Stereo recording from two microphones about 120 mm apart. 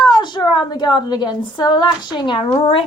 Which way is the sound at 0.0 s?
35° left (ahead or behind).